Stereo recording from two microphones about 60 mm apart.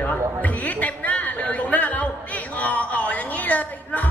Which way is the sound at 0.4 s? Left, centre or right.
Left.